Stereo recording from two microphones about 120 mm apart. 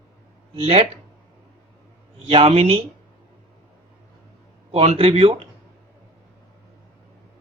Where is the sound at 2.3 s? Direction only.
55° right (ahead or behind).